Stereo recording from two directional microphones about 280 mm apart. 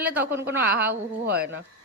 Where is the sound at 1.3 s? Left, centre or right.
Right.